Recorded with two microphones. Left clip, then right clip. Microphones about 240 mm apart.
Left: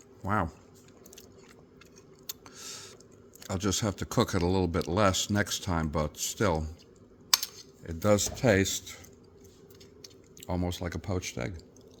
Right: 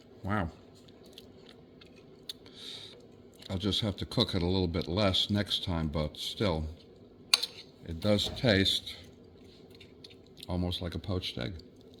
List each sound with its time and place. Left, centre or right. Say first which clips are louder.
2.2 s a sound: even; left
3.4 s speech: left 1 dB; left
7.4 s cutlery: right 2 dB; left
10.0 s speech: right 1 dB; left